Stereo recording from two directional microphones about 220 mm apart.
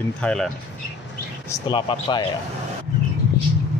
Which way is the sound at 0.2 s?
5° left (ahead or behind).